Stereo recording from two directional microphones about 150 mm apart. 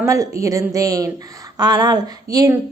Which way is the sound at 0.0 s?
20° right (ahead or behind).